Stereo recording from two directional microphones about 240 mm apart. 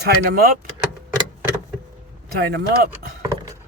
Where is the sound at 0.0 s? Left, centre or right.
Right.